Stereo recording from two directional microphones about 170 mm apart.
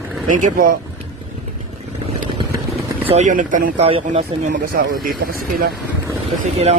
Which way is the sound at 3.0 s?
45° right (ahead or behind).